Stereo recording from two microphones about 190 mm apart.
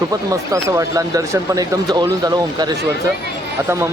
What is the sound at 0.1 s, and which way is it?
Speech, 15° right (ahead or behind).